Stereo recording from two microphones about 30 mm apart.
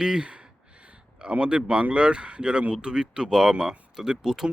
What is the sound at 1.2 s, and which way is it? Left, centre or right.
Speech, right.